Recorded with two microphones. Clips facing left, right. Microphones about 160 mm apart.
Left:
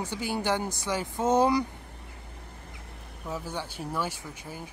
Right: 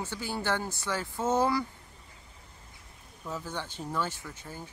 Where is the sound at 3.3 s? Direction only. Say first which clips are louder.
Left 2 dB; 10° left (ahead or behind).